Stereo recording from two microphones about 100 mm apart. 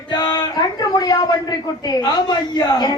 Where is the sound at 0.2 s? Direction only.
45° left (ahead or behind).